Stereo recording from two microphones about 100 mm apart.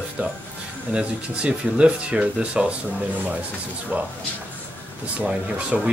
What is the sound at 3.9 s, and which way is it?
Speech, 15° right (ahead or behind).